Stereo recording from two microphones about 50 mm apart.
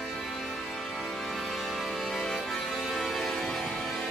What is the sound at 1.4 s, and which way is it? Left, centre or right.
Music, centre.